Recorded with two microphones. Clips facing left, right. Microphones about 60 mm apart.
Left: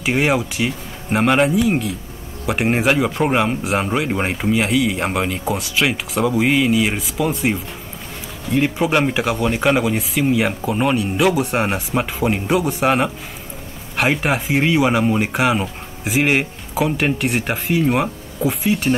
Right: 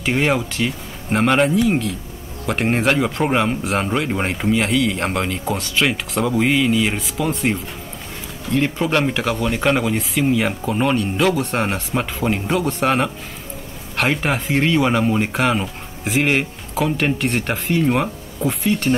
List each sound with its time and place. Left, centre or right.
0.0 s speech: centre